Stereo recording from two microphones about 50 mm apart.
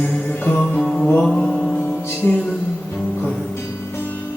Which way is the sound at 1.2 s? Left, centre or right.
Centre.